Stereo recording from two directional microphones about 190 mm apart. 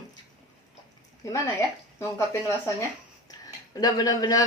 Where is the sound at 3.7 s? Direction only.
20° left (ahead or behind).